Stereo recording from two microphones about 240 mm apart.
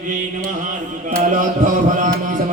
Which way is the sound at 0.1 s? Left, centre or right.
Right.